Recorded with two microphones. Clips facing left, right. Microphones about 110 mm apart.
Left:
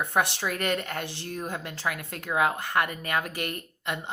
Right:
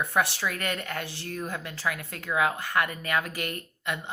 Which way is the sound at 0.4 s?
30° left (ahead or behind).